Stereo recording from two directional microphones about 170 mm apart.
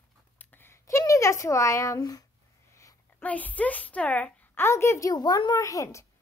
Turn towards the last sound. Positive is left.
turn(degrees=20)  # may be behind; listen again after turning